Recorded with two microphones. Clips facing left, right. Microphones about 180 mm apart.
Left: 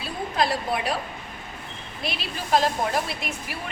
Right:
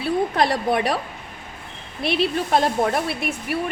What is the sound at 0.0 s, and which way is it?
Speech, 65° right (ahead or behind).